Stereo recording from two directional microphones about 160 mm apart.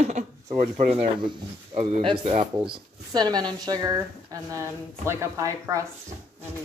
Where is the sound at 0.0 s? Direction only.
45° right (ahead or behind); by 5.9 s 20° right (ahead or behind).